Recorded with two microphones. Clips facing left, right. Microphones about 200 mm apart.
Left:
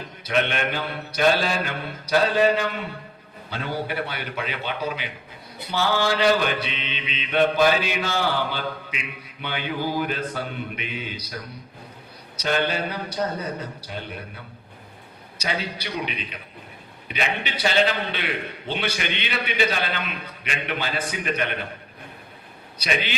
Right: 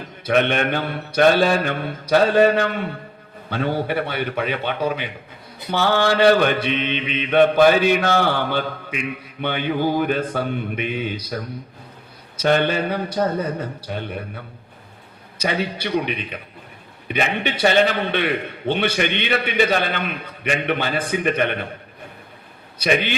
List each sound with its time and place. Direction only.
0.3 s mantra: 55° right (ahead or behind)
12.4 s a man's voice: 55° right (ahead or behind)
15.4 s mantra: 55° right (ahead or behind)
17.1 s a man's voice: 55° right (ahead or behind)
22.8 s a man's voice: 55° right (ahead or behind)